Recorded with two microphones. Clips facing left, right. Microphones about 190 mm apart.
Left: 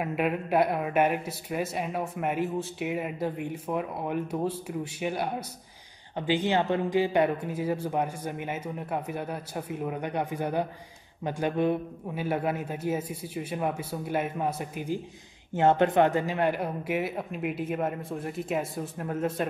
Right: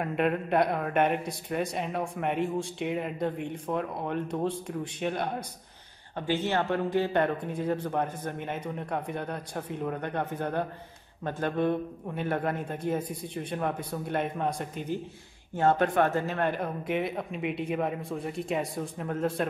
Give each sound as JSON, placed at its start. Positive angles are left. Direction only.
{"t": 0.0, "sound": "speech", "side_deg": 5}
{"t": 15.5, "sound": "speech", "side_deg": 20}